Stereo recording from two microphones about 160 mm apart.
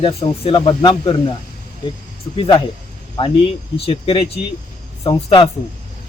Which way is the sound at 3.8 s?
35° left (ahead or behind).